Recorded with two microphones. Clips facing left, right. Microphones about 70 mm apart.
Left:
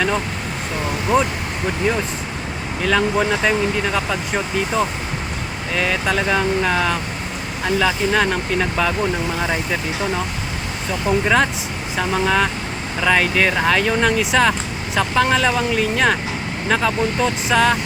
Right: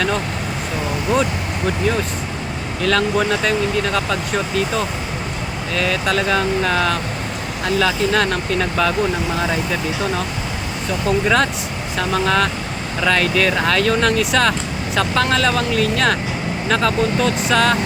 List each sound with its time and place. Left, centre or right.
1.1 s speech: centre
2.8 s speech: centre
11.0 s speech: centre